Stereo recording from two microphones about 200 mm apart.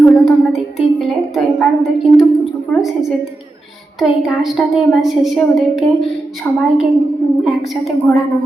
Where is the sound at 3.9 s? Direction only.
Centre (ahead or behind).